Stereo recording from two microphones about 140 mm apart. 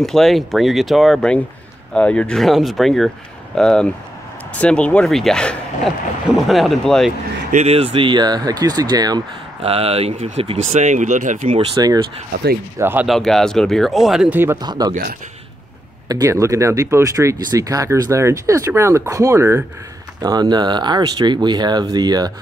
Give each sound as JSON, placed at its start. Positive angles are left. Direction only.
{"t": 0.0, "sound": "speech", "side_deg": 5}
{"t": 7.5, "sound": "speech", "side_deg": -45}
{"t": 9.6, "sound": "speech", "side_deg": -45}
{"t": 11.7, "sound": "speech", "side_deg": -25}
{"t": 12.7, "sound": "speech", "side_deg": -15}
{"t": 13.0, "sound": "speech", "side_deg": 0}
{"t": 14.6, "sound": "speech", "side_deg": -30}
{"t": 16.1, "sound": "speech", "side_deg": -25}